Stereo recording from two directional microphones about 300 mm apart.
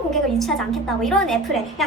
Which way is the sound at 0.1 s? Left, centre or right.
Centre.